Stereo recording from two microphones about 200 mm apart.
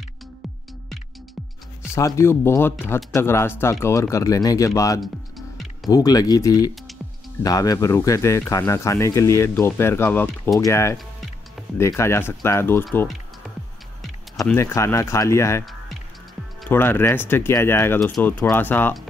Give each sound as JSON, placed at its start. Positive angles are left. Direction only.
{"t": 2.0, "sound": "speech", "side_deg": 15}
{"t": 14.4, "sound": "speech", "side_deg": 15}
{"t": 16.6, "sound": "speech", "side_deg": 10}